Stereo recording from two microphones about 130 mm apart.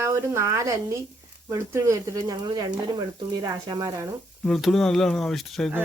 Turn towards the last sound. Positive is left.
turn(degrees=0)  # may be behind; listen again after turning